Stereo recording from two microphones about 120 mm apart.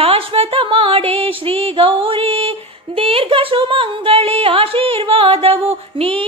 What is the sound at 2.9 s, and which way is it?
Carnatic music, 50° right (ahead or behind).